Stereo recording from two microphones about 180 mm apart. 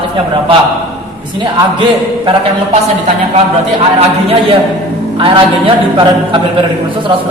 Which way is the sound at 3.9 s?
30° right (ahead or behind).